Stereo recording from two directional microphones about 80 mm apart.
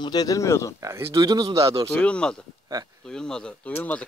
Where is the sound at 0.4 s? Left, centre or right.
Left.